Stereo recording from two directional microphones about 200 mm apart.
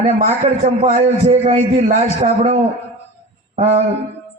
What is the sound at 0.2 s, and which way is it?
A man's voice, 35° right (ahead or behind).